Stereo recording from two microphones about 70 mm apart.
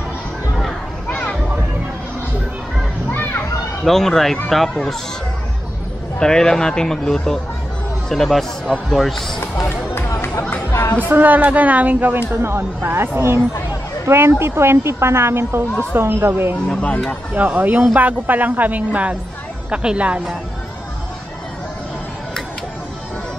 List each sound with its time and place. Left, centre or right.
1.0 s children playing: left
3.1 s a sound: left
3.8 s speech: centre
6.1 s speech: centre
9.7 s music: left
10.7 s chatter: left
11.1 s speech: right
12.3 s a woman's voice: right
16.6 s speech: centre
17.3 s a woman's voice: right